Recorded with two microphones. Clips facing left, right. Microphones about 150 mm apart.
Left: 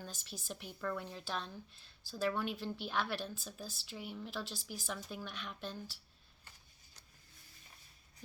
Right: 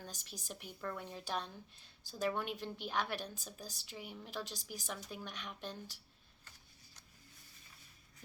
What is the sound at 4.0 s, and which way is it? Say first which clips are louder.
Speech: left 4 dB; 50° right (ahead or behind).